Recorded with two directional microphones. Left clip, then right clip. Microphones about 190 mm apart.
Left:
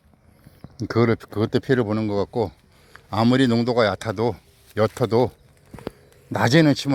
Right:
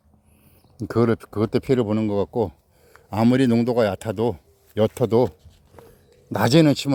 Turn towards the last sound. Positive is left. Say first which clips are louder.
# even
turn(degrees=-20)  # may be behind; listen again after turning